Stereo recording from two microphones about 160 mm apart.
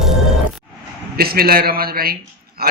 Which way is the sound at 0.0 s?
Centre (ahead or behind).